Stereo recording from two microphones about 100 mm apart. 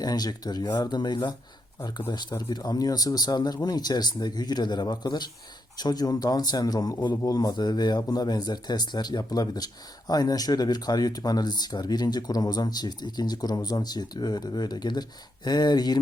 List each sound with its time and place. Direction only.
0.0 s a man's voice: 40° left (ahead or behind)